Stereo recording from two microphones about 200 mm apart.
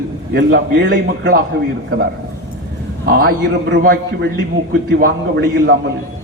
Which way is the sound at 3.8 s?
45° right (ahead or behind).